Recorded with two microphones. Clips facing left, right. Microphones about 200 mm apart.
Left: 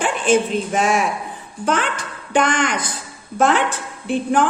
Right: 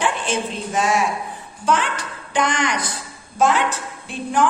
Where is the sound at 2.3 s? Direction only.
50° left (ahead or behind).